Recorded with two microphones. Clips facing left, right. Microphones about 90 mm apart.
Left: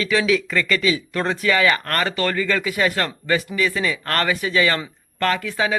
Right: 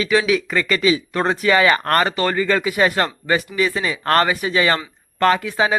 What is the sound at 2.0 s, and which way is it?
Speech, 25° right (ahead or behind).